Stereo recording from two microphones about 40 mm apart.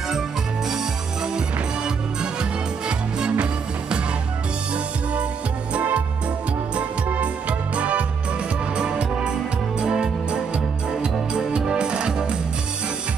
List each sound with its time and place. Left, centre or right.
2.9 s music: right
5.7 s music: right
7.2 s music: right